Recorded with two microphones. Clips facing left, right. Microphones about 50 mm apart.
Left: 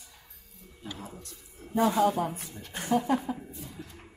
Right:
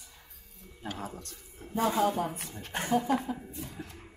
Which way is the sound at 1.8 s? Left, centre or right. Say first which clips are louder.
Left 3 dB; centre.